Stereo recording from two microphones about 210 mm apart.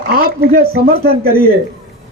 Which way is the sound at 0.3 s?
45° right (ahead or behind).